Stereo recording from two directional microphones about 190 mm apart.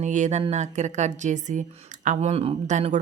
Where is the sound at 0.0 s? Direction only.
40° right (ahead or behind).